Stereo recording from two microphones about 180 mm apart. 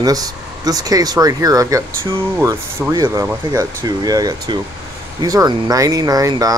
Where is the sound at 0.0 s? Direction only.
20° right (ahead or behind).